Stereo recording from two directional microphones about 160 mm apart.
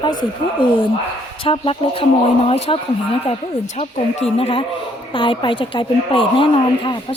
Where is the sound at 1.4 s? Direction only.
35° left (ahead or behind).